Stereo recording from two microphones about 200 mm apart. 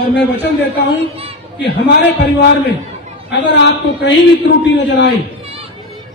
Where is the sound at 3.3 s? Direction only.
60° left (ahead or behind).